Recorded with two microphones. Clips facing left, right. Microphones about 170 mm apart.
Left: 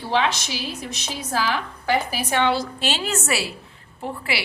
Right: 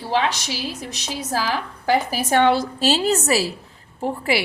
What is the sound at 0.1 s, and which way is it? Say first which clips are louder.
A woman's voice: right 1 dB; 35° right (ahead or behind).